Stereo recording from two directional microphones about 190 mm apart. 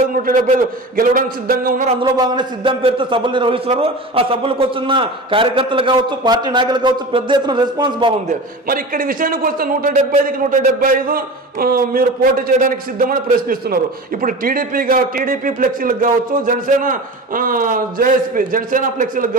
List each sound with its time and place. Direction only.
0.1 s a man's voice: 45° right (ahead or behind)
1.9 s a man's voice: 25° right (ahead or behind)
8.3 s a man's voice: 50° right (ahead or behind)